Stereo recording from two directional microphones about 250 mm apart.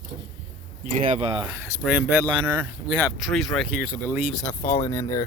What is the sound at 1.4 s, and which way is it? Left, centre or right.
Speech, centre.